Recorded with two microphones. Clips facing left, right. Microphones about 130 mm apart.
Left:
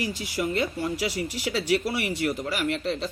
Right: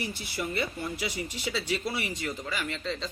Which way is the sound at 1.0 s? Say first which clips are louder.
Left 5 dB; 80° left.